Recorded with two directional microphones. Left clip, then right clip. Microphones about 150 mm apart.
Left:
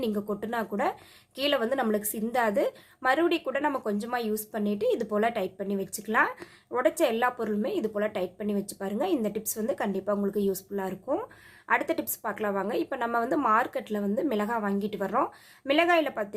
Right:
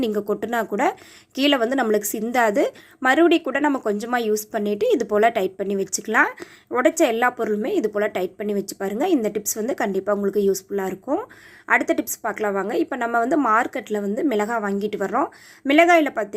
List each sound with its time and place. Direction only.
0.0 s a woman's voice: 35° right (ahead or behind)